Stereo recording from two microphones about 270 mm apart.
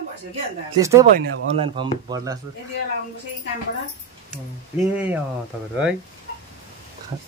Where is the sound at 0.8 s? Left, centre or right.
Centre.